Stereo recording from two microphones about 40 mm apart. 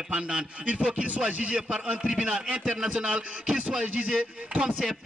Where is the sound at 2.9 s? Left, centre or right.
Right.